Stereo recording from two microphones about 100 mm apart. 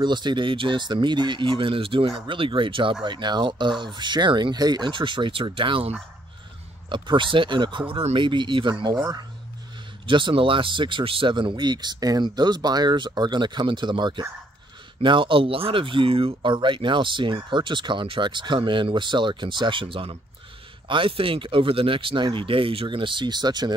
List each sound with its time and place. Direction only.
0.0 s speech: 50° right (ahead or behind)
7.9 s speech: 70° right (ahead or behind)
10.0 s speech: 55° right (ahead or behind)